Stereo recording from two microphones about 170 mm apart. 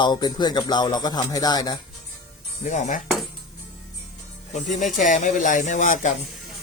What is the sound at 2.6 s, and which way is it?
Speech, 45° left (ahead or behind).